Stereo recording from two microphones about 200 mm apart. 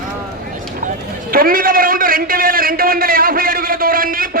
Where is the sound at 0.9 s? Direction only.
45° right (ahead or behind).